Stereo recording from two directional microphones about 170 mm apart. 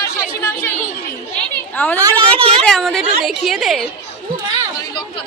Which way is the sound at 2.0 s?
25° right (ahead or behind).